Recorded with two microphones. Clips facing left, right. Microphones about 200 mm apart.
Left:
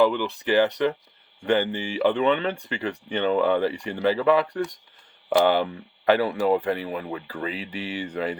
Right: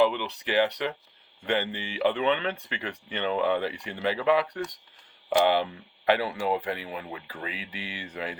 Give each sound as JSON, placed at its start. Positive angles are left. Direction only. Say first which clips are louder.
{"t": 0.0, "sound": "speech", "louder": "left 3 dB", "side_deg": 45}
{"t": 6.1, "sound": "speech", "louder": "left 5 dB", "side_deg": 45}